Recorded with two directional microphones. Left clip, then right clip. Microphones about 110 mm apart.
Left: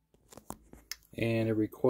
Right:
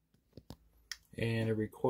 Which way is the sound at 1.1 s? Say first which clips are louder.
Left 5 dB; 35° left (ahead or behind).